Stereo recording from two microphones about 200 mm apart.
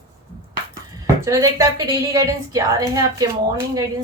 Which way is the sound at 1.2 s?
15° right (ahead or behind).